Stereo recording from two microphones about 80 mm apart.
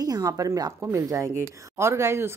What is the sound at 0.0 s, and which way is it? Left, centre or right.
Speech, right.